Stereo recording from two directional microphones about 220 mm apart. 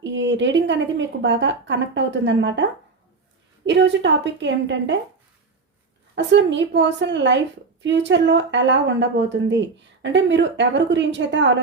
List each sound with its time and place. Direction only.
0.0 s a woman's voice: 55° right (ahead or behind)
3.7 s a woman's voice: 55° right (ahead or behind)
6.1 s a woman's voice: 55° right (ahead or behind)